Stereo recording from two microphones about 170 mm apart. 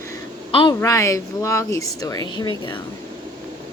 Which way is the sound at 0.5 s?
25° left (ahead or behind).